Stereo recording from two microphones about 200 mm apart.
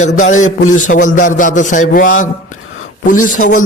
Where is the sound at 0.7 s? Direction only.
40° left (ahead or behind).